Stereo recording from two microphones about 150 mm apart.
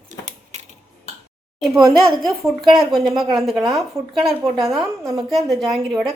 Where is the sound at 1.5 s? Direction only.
Centre (ahead or behind).